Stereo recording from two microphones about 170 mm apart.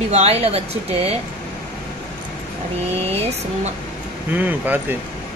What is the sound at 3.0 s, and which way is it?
Speech, 35° right (ahead or behind).